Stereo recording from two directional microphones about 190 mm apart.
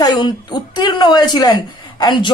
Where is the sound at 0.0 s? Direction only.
20° left (ahead or behind).